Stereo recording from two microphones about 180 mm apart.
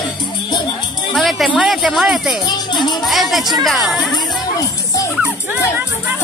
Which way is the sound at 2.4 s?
25° left (ahead or behind).